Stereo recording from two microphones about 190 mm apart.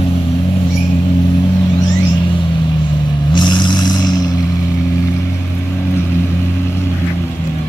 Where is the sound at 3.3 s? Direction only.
25° left (ahead or behind).